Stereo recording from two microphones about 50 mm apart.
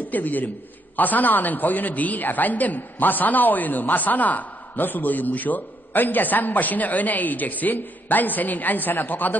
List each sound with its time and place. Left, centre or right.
0.1 s a man's voice: left